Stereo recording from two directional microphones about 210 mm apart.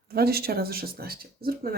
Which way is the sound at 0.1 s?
45° right (ahead or behind).